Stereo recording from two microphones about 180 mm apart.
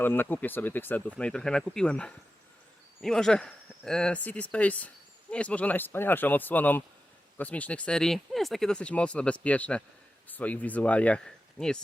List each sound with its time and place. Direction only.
0.0 s speech: 10° left (ahead or behind)